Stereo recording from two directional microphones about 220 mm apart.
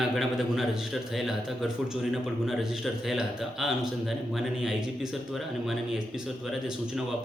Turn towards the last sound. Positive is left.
turn(degrees=0)  # may be behind; listen again after turning